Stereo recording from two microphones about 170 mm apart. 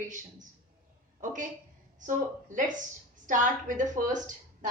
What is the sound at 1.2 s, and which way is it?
Speech, 50° right (ahead or behind).